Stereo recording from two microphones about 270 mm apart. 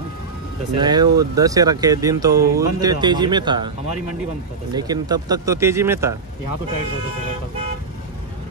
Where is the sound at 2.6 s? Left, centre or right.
Centre.